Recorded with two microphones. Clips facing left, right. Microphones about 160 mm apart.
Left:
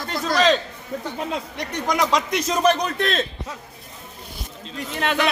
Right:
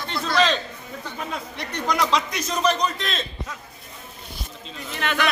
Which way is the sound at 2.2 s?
50° left (ahead or behind).